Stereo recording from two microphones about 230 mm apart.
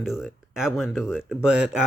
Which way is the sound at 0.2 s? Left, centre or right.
Centre.